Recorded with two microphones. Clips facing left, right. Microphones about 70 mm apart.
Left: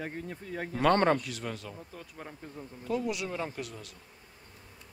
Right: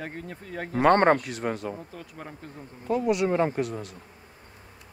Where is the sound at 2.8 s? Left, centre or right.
Right.